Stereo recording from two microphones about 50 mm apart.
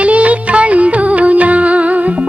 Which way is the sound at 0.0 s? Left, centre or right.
Right.